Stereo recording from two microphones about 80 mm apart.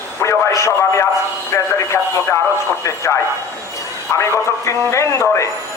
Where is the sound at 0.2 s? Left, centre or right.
Left.